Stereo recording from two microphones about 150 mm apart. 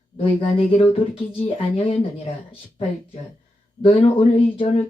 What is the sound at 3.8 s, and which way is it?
Speech, 35° left (ahead or behind).